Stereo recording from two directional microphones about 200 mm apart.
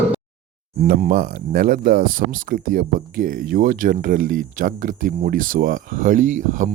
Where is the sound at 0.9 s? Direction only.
45° right (ahead or behind).